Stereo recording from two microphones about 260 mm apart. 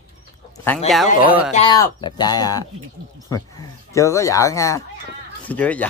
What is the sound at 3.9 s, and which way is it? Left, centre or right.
Speech, centre.